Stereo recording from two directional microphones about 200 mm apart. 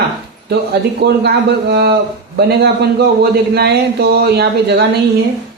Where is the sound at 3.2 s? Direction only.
55° right (ahead or behind).